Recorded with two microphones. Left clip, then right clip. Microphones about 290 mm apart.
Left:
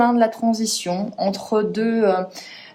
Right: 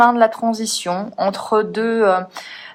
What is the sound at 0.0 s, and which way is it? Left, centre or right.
Speech, centre.